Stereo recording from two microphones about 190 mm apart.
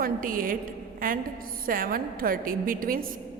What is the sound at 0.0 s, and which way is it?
A woman's voice, 45° right (ahead or behind).